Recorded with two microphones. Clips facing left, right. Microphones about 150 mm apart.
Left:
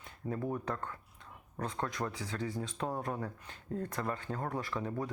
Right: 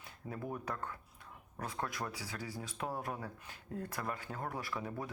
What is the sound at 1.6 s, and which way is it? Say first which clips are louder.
Speech: left 4 dB; 5° right (ahead or behind).